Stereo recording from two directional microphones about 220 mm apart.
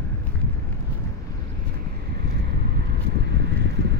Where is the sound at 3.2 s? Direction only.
50° right (ahead or behind).